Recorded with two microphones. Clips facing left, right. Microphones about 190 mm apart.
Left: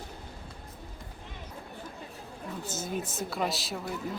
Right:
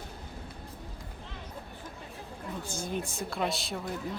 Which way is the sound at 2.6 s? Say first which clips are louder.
Left 1 dB; 20° left (ahead or behind).